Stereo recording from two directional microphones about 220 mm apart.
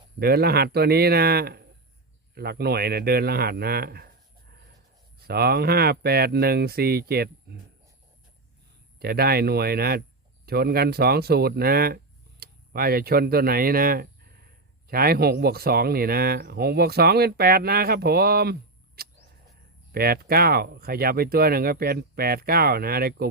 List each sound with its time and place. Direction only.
0.2 s speech: 45° right (ahead or behind)
5.2 s speech: 45° right (ahead or behind)
9.0 s speech: 45° right (ahead or behind)